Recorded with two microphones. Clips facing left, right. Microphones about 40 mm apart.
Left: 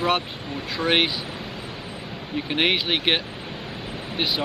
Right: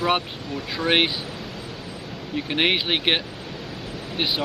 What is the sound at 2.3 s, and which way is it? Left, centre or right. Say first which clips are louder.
Speech: even; centre.